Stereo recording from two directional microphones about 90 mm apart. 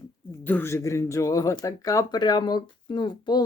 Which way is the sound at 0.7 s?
35° left (ahead or behind).